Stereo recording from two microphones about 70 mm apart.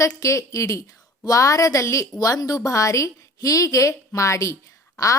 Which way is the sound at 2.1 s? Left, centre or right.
Left.